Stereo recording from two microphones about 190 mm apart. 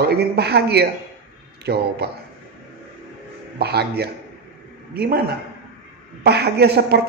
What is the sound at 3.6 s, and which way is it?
Speech, 60° right (ahead or behind).